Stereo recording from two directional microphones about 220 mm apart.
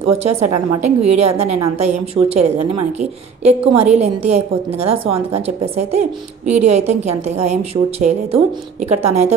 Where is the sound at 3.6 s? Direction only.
30° right (ahead or behind).